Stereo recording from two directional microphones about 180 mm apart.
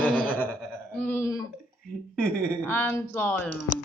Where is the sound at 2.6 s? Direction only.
10° left (ahead or behind).